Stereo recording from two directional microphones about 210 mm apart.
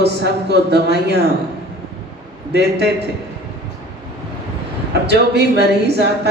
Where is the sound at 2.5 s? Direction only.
55° right (ahead or behind).